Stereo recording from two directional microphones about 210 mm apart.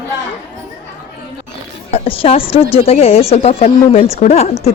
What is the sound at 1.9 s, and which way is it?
Speech, 25° left (ahead or behind).